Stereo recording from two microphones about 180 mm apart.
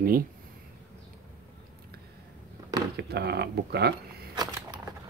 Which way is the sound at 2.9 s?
65° right (ahead or behind).